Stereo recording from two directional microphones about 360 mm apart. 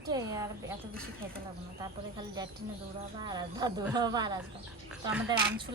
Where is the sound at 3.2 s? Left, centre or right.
Centre.